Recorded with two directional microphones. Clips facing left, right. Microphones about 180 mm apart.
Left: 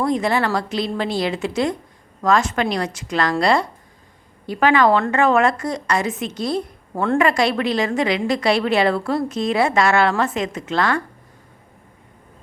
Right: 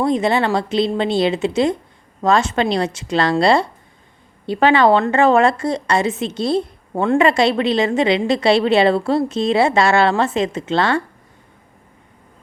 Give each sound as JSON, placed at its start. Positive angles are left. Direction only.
{"t": 0.0, "sound": "a woman's voice", "side_deg": -25}